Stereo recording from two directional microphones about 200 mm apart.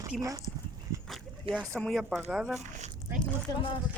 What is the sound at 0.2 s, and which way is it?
Speech, 15° right (ahead or behind).